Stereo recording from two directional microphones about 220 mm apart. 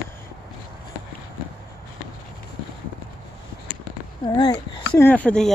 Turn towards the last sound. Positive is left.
turn(degrees=5)  # may be behind; listen again after turning